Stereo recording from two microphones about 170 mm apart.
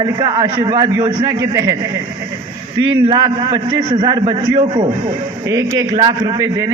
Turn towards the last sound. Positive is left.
turn(degrees=-20)  # may be behind; listen again after turning